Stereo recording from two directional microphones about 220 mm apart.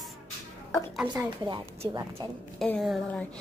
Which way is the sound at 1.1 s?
20° right (ahead or behind).